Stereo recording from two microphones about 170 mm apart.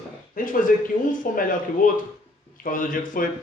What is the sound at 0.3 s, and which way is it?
Speech, 55° left (ahead or behind).